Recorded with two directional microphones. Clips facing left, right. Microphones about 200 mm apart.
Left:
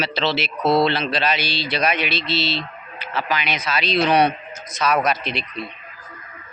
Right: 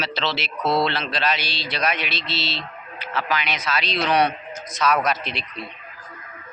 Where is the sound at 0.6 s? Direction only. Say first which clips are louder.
Left 4 dB; 25° left (ahead or behind).